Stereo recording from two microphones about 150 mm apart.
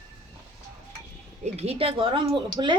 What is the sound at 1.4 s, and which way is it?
Speech, 45° right (ahead or behind).